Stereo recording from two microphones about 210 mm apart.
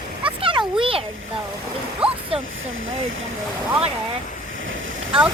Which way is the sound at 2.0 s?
5° right (ahead or behind).